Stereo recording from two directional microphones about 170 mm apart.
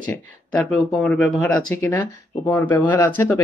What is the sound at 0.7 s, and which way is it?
Speech, 5° left (ahead or behind).